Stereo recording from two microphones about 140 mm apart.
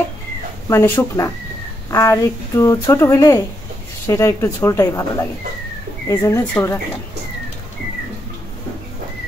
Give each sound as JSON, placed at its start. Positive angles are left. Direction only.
{"t": 0.7, "sound": "speech", "side_deg": 20}